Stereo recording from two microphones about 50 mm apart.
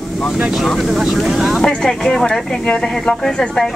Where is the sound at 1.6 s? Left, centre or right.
Centre.